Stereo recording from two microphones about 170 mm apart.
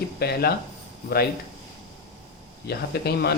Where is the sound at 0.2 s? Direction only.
65° left (ahead or behind).